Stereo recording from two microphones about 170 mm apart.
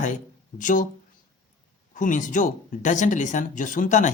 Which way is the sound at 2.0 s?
50° left (ahead or behind).